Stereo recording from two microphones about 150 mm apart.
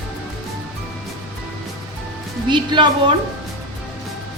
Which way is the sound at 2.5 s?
30° right (ahead or behind).